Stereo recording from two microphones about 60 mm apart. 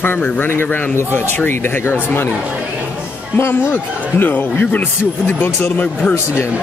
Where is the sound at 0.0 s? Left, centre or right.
Left.